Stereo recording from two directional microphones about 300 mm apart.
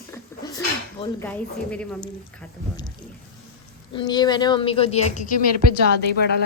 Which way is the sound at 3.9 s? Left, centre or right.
Centre.